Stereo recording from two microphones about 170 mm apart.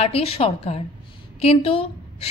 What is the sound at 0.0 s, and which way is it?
A woman's voice, 35° left (ahead or behind).